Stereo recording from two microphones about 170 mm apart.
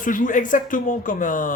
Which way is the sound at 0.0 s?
50° left (ahead or behind).